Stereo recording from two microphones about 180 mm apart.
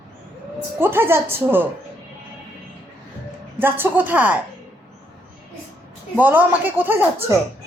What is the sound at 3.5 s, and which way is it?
Speech, 10° right (ahead or behind).